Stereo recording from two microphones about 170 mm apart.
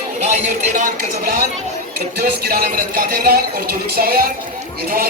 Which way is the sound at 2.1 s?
65° right (ahead or behind).